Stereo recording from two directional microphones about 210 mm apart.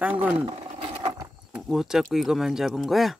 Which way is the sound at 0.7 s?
25° right (ahead or behind).